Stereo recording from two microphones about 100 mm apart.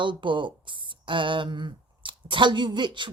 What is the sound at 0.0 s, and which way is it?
Speech, 55° right (ahead or behind).